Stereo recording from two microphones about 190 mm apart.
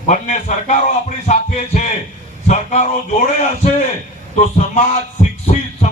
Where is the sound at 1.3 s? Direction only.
40° left (ahead or behind).